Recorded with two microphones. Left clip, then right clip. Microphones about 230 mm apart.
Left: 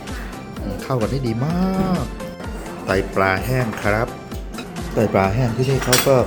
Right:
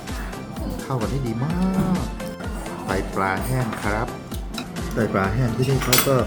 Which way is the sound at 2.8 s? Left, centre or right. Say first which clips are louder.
Left 5 dB; centre.